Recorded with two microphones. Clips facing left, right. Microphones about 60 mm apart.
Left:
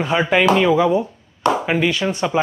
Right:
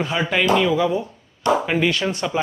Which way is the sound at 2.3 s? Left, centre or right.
Centre.